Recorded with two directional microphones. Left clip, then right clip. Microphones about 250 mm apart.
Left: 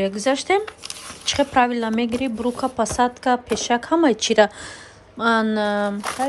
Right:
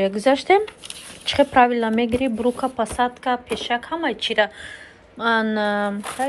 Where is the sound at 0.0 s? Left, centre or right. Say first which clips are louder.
Right 3 dB; centre.